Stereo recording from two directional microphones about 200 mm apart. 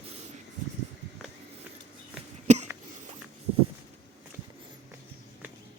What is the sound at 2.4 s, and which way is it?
Cough, 35° right (ahead or behind).